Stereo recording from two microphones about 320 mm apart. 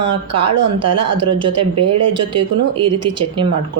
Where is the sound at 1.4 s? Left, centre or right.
Centre.